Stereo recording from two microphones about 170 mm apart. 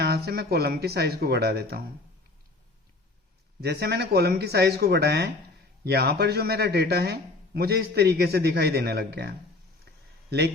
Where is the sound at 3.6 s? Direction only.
75° right (ahead or behind).